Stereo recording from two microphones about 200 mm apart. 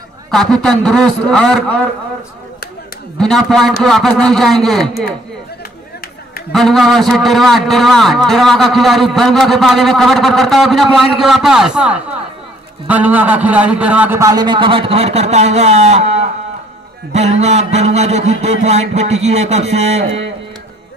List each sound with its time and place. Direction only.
0.3 s a man's voice: centre (ahead or behind)
3.2 s a man's voice: centre (ahead or behind)
6.5 s a man's voice: centre (ahead or behind); by 20.1 s 30° right (ahead or behind)